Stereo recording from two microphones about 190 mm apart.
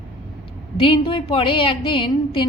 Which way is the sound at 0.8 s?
25° left (ahead or behind).